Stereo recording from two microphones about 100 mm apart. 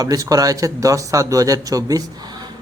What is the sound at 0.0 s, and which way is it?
Speech, 35° right (ahead or behind).